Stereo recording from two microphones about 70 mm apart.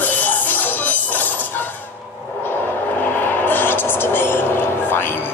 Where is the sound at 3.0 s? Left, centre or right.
Left.